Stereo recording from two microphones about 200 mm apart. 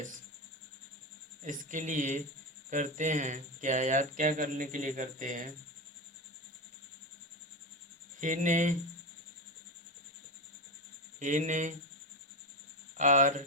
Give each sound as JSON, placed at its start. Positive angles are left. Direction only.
{"t": 1.5, "sound": "speech", "side_deg": -40}
{"t": 8.2, "sound": "speech", "side_deg": -40}
{"t": 11.2, "sound": "speech", "side_deg": -40}
{"t": 13.0, "sound": "speech", "side_deg": -40}